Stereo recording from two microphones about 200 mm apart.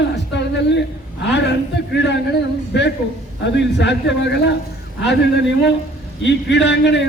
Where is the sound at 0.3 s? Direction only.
60° left (ahead or behind).